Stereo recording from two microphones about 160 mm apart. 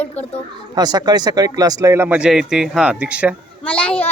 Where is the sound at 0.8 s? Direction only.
25° right (ahead or behind); by 3.3 s 5° right (ahead or behind).